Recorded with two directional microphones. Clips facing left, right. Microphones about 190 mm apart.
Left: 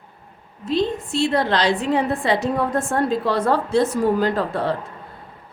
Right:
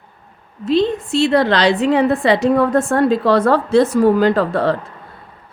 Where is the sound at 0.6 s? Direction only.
80° right.